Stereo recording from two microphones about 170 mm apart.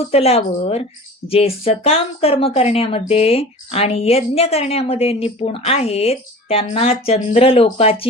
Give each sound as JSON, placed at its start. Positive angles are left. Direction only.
{"t": 0.1, "sound": "a woman's voice", "side_deg": 35}